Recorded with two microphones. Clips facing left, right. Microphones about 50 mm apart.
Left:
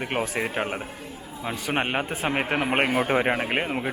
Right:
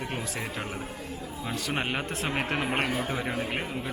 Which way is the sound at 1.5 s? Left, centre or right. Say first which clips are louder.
Left 5 dB; left.